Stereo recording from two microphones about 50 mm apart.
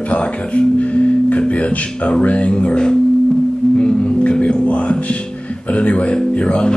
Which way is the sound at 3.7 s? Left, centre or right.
Left.